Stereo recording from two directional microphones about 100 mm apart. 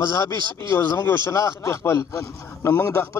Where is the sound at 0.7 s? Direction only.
25° left (ahead or behind).